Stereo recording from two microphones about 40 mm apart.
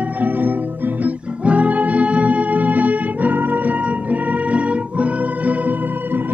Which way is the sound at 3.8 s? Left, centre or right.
Right.